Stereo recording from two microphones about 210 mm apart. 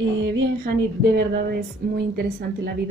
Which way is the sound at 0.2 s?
60° right (ahead or behind).